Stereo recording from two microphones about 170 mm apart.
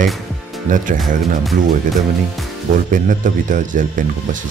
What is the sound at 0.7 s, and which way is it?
Speech, 50° right (ahead or behind).